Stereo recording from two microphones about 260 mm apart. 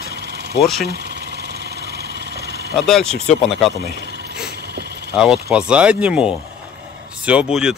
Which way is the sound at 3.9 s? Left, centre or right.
Right.